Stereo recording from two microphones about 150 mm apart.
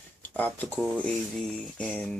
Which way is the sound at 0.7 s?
5° right (ahead or behind).